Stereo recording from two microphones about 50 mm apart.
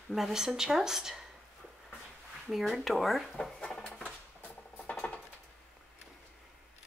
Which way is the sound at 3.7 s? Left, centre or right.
Centre.